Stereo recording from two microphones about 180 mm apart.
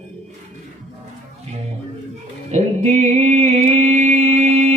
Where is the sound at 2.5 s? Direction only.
40° right (ahead or behind).